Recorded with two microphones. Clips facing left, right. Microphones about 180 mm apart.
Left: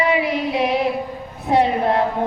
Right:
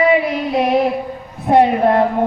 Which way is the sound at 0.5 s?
45° right (ahead or behind).